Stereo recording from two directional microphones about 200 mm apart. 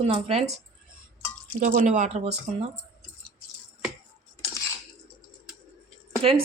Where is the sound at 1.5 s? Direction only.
40° right (ahead or behind).